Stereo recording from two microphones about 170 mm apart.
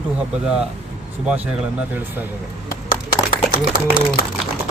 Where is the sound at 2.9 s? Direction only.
55° left (ahead or behind).